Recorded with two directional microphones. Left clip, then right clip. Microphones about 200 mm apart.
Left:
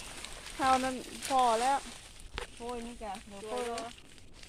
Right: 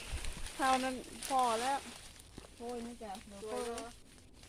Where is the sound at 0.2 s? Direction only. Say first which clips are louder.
Left 3 dB; 30° left (ahead or behind).